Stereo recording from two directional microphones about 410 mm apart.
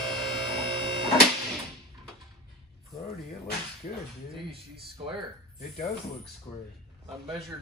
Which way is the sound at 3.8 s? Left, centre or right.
Centre.